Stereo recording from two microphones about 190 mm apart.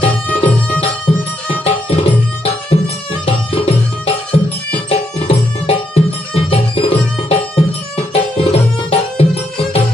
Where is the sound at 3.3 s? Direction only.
30° left (ahead or behind).